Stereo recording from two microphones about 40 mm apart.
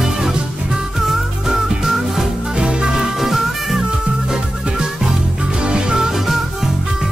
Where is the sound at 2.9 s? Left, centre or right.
Centre.